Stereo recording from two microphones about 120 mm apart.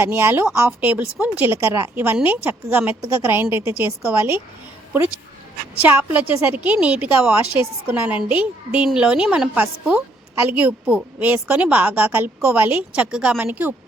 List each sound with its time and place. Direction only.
0.0 s a woman's voice: 20° right (ahead or behind)
5.8 s a woman's voice: 15° right (ahead or behind)